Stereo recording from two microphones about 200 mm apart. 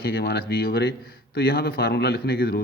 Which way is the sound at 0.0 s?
55° left (ahead or behind).